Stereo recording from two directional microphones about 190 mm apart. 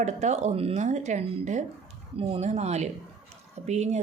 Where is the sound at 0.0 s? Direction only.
35° right (ahead or behind).